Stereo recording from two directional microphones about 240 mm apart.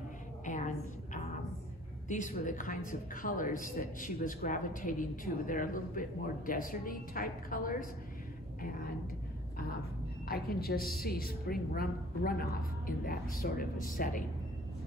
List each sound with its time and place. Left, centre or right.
0.5 s a sound: left
2.0 s a man's voice: left
10.2 s a man's voice: left